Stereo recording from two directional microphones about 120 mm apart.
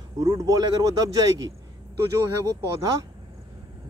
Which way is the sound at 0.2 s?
30° right (ahead or behind).